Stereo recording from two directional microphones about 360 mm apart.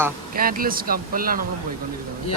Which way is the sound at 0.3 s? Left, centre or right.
Right.